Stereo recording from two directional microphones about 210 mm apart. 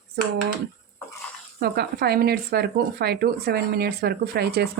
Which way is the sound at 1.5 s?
50° right (ahead or behind).